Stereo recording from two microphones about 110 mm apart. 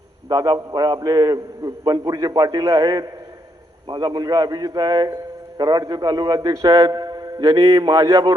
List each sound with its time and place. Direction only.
0.3 s a man's voice: 35° right (ahead or behind)